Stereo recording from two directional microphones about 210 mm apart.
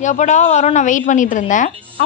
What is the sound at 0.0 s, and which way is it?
A woman's voice, 35° left (ahead or behind).